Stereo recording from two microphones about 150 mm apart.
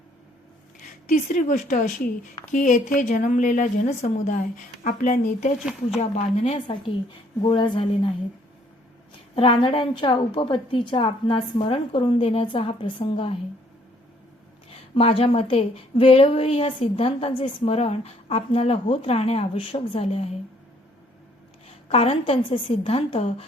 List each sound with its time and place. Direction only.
1.1 s a woman's voice: 55° left (ahead or behind); by 8.1 s 35° left (ahead or behind)
9.3 s a woman's voice: 35° left (ahead or behind)
14.9 s a woman's voice: 40° left (ahead or behind)
21.8 s a woman's voice: 40° left (ahead or behind)